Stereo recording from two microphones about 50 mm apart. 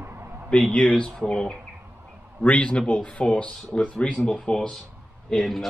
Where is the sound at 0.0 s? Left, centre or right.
Right.